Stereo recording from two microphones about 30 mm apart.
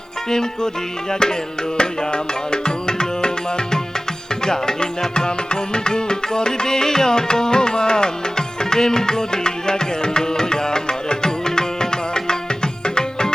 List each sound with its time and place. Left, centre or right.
0.3 s music: centre
1.8 s music: left